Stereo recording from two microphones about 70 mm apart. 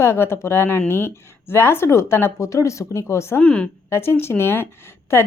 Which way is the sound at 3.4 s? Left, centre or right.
Centre.